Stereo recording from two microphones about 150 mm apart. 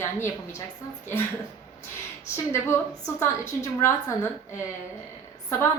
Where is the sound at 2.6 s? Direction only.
20° left (ahead or behind).